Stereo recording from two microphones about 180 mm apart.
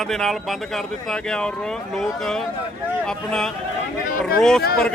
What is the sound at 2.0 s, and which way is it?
Speech, centre (ahead or behind).